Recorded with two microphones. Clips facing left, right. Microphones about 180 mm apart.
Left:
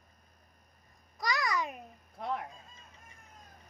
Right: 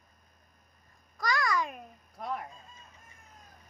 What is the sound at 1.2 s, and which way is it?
Babbling, 20° left (ahead or behind).